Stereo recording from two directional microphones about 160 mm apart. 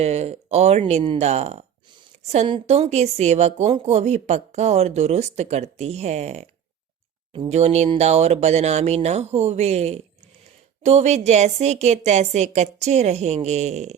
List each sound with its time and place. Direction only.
0.0 s speech: 40° right (ahead or behind)
2.6 s speech: 45° right (ahead or behind)
7.5 s speech: 45° right (ahead or behind)